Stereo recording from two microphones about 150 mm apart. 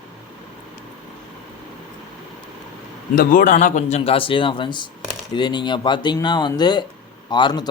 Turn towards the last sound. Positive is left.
turn(degrees=30)  # may be behind; listen again after turning